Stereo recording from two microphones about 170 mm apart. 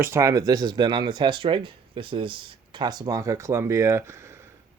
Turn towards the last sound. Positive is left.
turn(degrees=-15)  # may be behind; listen again after turning